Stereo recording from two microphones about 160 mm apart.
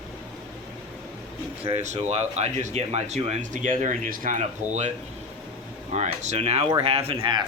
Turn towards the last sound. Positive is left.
turn(degrees=-35)  # may be behind; listen again after turning